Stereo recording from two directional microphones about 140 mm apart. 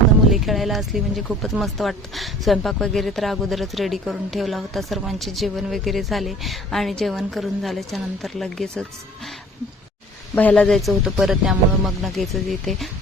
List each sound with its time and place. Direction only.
0.3 s speech: centre (ahead or behind)
10.3 s speech: 10° left (ahead or behind)